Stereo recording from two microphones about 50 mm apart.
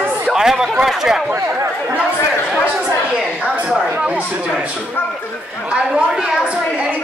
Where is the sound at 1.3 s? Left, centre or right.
Right.